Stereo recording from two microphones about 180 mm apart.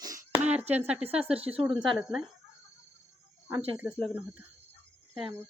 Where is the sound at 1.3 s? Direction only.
5° right (ahead or behind).